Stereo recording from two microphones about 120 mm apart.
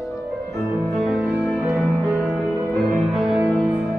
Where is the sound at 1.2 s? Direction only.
15° right (ahead or behind).